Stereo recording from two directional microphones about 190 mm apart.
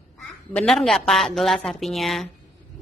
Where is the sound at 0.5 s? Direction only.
Centre (ahead or behind).